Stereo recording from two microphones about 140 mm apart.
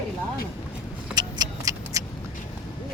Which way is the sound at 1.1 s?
25° right (ahead or behind).